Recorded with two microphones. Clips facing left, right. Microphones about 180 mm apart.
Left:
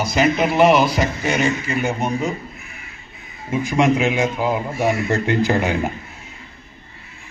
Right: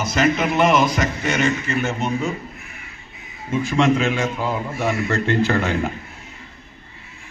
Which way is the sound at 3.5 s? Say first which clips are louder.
Left 1 dB; 15° left (ahead or behind).